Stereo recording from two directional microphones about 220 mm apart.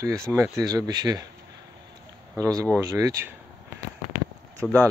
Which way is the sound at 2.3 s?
15° right (ahead or behind).